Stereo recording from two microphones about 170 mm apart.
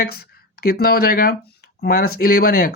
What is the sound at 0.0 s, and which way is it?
Speech, 65° left (ahead or behind).